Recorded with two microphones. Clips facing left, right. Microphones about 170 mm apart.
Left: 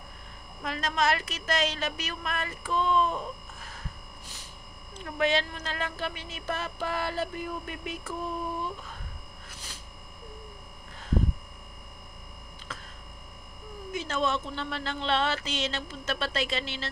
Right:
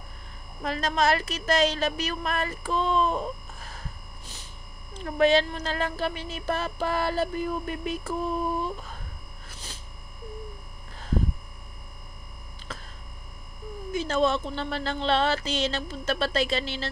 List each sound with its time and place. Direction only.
0.6 s a woman's voice: 35° right (ahead or behind)
4.9 s a woman's voice: 35° right (ahead or behind)
13.9 s a woman's voice: 35° right (ahead or behind)